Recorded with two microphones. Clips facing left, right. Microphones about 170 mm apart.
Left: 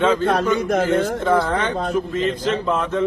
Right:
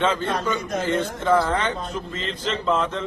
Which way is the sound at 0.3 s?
65° left (ahead or behind).